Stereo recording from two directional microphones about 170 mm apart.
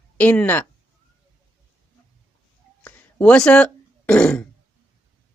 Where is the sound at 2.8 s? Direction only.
10° left (ahead or behind).